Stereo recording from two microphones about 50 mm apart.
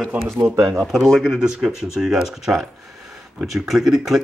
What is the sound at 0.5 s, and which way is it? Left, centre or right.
Speech, right.